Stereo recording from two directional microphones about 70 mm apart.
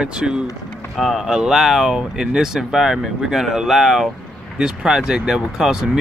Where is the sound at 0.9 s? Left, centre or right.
Centre.